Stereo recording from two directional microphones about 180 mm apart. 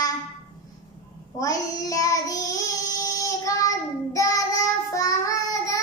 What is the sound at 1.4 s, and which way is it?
Child singing, 20° left (ahead or behind).